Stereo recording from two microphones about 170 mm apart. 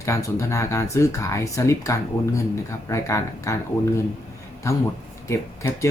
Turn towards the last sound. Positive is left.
turn(degrees=15)  # may be behind; listen again after turning